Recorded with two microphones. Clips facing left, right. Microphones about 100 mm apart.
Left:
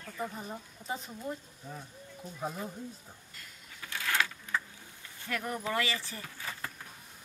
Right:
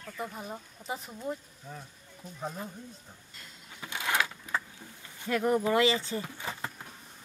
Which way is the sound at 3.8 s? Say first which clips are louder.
Right 2 dB; 20° right (ahead or behind).